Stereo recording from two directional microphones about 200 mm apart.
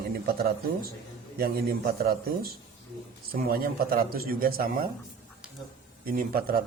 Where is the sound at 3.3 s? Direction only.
45° right (ahead or behind).